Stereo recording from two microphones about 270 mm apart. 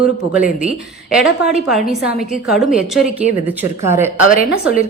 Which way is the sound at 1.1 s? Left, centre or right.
Centre.